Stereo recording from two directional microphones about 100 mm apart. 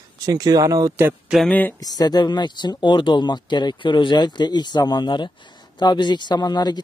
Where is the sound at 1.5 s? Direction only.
15° left (ahead or behind).